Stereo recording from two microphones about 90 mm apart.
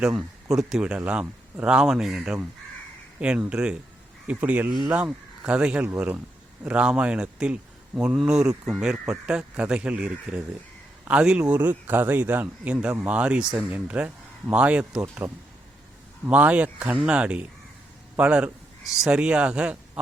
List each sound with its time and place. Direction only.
0.0 s a man's voice: 10° right (ahead or behind)